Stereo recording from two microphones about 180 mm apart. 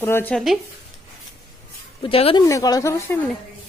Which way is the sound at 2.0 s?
30° left (ahead or behind).